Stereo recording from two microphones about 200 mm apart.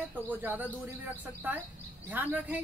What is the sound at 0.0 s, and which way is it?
A woman's voice, 10° right (ahead or behind).